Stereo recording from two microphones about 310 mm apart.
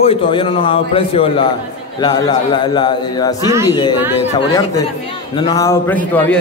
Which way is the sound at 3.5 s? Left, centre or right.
Centre.